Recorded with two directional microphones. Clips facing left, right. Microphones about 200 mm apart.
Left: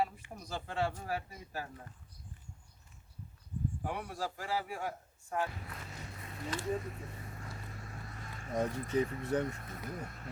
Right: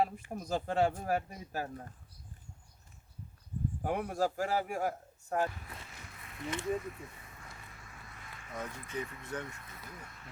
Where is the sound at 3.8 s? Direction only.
45° right (ahead or behind).